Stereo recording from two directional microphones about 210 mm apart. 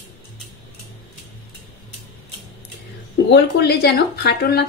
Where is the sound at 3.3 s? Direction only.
50° left (ahead or behind).